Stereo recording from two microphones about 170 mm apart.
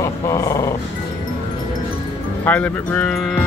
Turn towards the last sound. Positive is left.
turn(degrees=5)  # may be behind; listen again after turning